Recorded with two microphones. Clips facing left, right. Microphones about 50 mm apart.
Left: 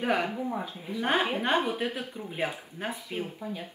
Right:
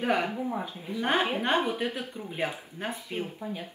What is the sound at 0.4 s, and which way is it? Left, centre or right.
Speech, centre.